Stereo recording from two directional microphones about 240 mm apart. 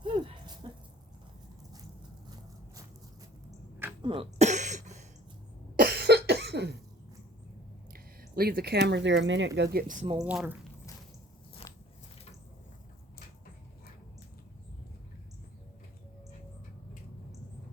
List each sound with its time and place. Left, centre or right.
0.0 s a sound: centre
4.0 s cough: right
5.7 s cough: right
7.9 s speech: right
9.6 s speech: right
10.2 s speech: centre